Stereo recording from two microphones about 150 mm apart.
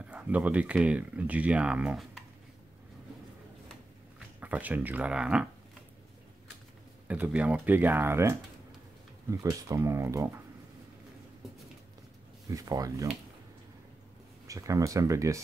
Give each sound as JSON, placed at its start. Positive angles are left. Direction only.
{"t": 0.0, "sound": "speech", "side_deg": -10}
{"t": 4.4, "sound": "speech", "side_deg": -10}
{"t": 7.1, "sound": "speech", "side_deg": -10}
{"t": 12.4, "sound": "speech", "side_deg": -25}
{"t": 14.5, "sound": "speech", "side_deg": -20}